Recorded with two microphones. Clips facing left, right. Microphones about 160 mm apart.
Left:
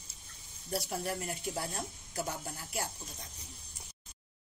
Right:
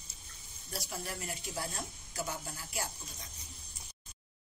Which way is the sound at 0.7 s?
60° left (ahead or behind).